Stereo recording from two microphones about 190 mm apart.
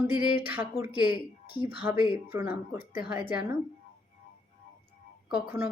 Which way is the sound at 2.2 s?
10° right (ahead or behind).